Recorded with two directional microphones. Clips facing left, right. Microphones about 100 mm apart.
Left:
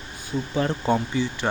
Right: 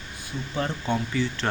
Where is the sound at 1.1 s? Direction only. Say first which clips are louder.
Left 1 dB; 15° left (ahead or behind).